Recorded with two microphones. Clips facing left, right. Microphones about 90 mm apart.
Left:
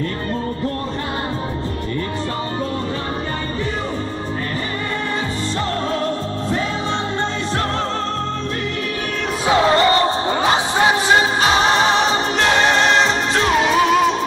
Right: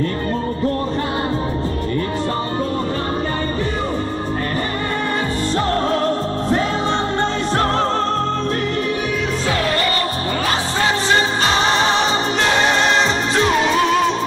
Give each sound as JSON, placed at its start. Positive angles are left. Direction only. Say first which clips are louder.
{"t": 5.9, "sound": "music", "louder": "right 3 dB", "side_deg": -45}
{"t": 9.5, "sound": "music", "louder": "left 8 dB", "side_deg": 25}